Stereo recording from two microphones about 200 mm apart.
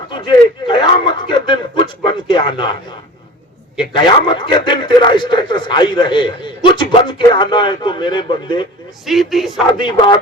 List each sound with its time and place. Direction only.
0.1 s a man's voice: 25° left (ahead or behind)
3.8 s a man's voice: 25° left (ahead or behind)
9.0 s speech: centre (ahead or behind)
9.7 s a man's voice: 25° left (ahead or behind)